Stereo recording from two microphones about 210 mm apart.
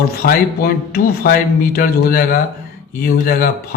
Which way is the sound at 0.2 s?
45° left (ahead or behind).